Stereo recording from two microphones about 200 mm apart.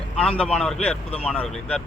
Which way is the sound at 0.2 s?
5° left (ahead or behind).